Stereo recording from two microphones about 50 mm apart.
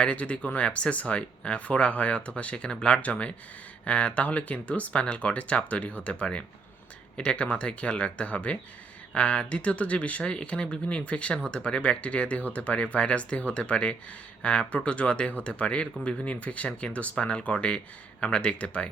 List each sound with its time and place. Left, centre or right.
0.0 s speech: left